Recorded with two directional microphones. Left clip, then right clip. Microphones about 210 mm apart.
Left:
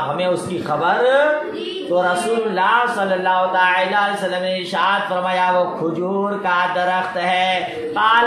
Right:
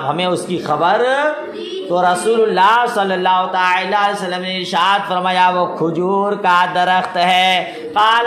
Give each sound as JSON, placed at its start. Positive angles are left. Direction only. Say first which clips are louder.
{"t": 0.2, "sound": "a man's voice", "louder": "right 2 dB", "side_deg": -45}